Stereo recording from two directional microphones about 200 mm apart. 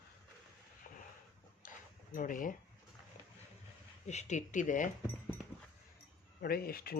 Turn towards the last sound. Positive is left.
turn(degrees=50)  # may be behind; listen again after turning